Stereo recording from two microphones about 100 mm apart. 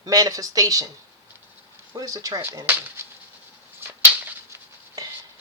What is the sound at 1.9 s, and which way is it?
Speech, 35° right (ahead or behind).